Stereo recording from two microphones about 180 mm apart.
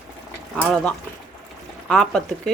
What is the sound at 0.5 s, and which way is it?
Speech, 5° left (ahead or behind).